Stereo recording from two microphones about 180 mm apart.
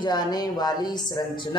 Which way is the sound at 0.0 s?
20° left (ahead or behind).